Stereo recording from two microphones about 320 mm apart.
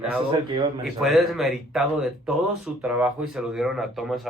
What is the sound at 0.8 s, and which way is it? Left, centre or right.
Speech, centre.